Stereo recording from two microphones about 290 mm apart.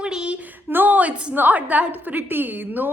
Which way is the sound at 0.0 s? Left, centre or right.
Centre.